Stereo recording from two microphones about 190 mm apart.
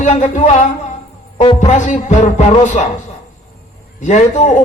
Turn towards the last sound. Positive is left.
turn(degrees=40)  # may be behind; listen again after turning